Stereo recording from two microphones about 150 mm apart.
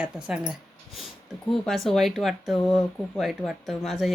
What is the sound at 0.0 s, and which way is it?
Speech, 5° right (ahead or behind).